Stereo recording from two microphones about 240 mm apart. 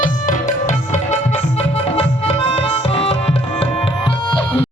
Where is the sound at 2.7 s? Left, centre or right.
Left.